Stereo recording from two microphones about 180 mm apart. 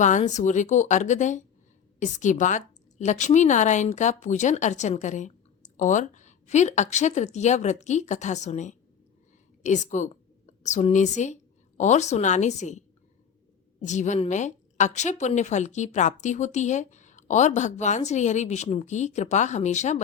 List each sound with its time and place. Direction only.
0.0 s a woman's voice: 40° left (ahead or behind)
13.8 s a woman's voice: 40° left (ahead or behind)